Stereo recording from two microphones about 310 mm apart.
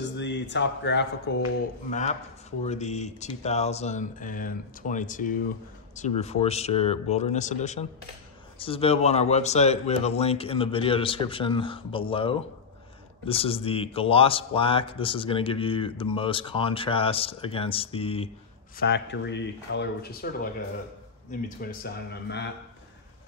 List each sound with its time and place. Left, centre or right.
0.0 s speech: left
1.9 s speech: left
18.8 s speech: left
21.3 s speech: left